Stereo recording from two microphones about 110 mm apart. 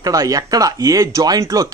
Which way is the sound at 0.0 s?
35° right (ahead or behind).